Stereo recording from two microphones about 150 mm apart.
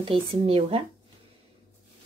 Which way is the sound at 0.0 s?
40° right (ahead or behind).